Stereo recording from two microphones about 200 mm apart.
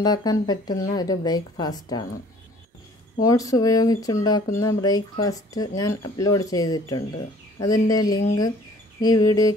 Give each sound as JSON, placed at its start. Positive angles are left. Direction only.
{"t": 0.0, "sound": "a woman's voice", "side_deg": 20}
{"t": 3.2, "sound": "speech", "side_deg": 15}